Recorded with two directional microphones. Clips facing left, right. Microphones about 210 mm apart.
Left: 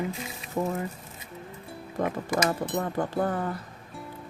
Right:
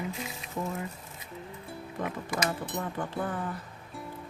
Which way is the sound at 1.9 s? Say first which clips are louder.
Left 6 dB; 45° left (ahead or behind).